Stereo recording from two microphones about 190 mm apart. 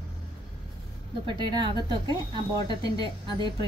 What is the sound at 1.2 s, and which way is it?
Speech, 25° right (ahead or behind).